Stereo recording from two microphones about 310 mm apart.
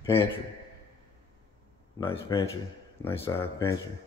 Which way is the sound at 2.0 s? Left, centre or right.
Centre.